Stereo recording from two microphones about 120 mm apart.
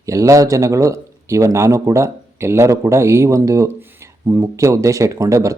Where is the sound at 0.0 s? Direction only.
25° right (ahead or behind).